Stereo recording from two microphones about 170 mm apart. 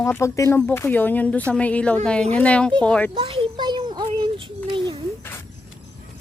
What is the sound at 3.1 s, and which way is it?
Child singing, 30° right (ahead or behind).